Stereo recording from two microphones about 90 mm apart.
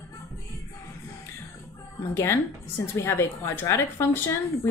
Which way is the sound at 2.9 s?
30° left (ahead or behind).